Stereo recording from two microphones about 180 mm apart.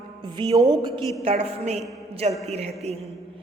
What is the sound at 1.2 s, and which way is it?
A woman's voice, 35° right (ahead or behind).